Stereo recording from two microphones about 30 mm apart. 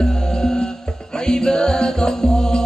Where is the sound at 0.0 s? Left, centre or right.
Left.